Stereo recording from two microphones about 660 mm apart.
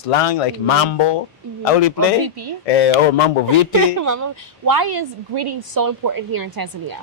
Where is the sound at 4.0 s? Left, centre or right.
Right.